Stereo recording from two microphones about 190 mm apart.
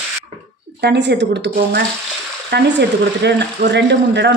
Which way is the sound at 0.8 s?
65° right (ahead or behind).